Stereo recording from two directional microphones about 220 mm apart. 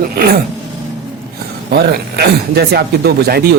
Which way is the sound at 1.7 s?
45° right (ahead or behind).